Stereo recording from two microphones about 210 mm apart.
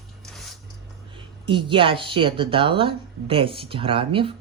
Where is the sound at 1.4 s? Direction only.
25° right (ahead or behind).